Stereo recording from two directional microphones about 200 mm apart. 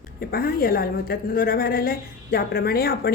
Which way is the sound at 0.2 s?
50° left (ahead or behind).